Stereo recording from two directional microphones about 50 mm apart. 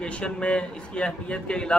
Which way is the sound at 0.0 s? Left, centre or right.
Left.